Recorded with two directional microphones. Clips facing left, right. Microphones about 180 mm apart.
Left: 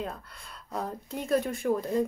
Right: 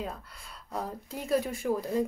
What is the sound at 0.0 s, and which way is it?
Speech, 5° right (ahead or behind).